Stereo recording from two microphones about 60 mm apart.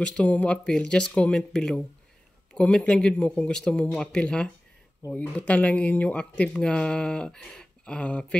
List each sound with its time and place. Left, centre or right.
0.0 s speech: centre